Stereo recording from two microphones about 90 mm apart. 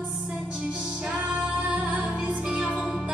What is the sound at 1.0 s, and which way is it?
Music, 15° right (ahead or behind).